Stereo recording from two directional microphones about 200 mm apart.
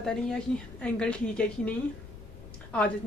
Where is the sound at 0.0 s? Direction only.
5° left (ahead or behind).